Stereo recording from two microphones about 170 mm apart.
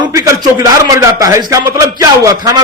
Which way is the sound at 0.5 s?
20° right (ahead or behind).